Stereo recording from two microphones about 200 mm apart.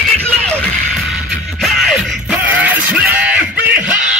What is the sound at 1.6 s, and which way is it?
Music, centre (ahead or behind).